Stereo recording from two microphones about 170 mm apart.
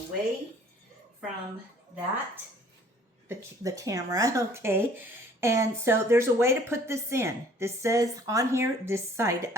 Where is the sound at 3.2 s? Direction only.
20° right (ahead or behind).